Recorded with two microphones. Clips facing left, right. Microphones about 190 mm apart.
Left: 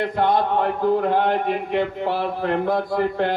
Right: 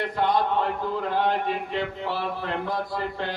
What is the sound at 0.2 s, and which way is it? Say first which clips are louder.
A man's voice: left 3 dB; 55° left (ahead or behind).